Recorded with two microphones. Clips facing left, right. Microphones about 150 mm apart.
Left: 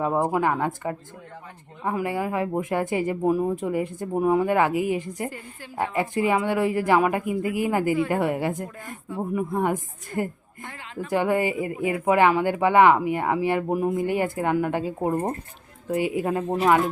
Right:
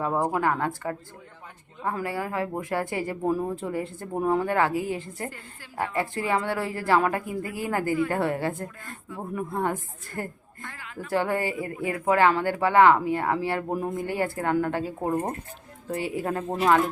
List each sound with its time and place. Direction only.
0.0 s a woman's voice: 10° left (ahead or behind)